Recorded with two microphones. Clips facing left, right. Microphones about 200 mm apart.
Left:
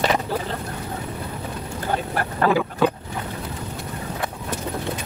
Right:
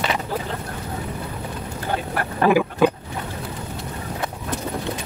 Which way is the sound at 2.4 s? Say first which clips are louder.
Right 3 dB; 15° right (ahead or behind).